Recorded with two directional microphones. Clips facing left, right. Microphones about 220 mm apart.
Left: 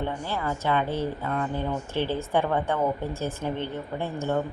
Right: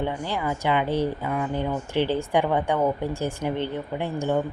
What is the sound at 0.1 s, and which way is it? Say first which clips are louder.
A woman's voice: right 2 dB; 15° right (ahead or behind).